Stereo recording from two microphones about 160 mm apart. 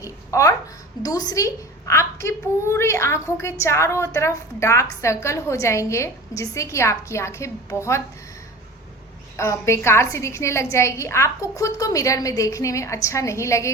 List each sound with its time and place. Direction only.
0.0 s a sound: 20° left (ahead or behind)
1.0 s a child's voice: 20° left (ahead or behind)
9.4 s a woman's voice: 15° left (ahead or behind)